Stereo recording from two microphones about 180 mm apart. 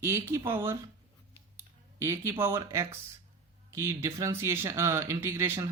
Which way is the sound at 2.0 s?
15° right (ahead or behind).